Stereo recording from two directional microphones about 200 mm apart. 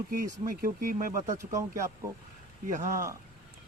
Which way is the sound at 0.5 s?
45° right (ahead or behind).